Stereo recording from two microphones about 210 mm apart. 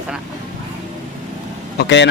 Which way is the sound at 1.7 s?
55° left (ahead or behind).